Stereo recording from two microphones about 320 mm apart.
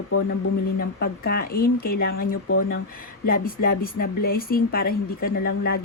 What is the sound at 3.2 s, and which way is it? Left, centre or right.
A woman's voice, left.